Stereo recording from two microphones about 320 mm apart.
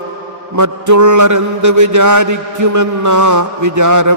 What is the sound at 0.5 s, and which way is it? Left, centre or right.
Mantra, right.